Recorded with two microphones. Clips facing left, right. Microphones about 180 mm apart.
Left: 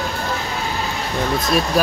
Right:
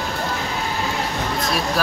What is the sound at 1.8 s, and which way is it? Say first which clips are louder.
Speech: left 4 dB; 15° left (ahead or behind).